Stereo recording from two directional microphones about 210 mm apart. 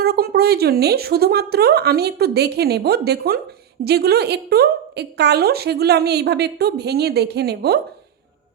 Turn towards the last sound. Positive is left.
turn(degrees=-50)  # may be behind; listen again after turning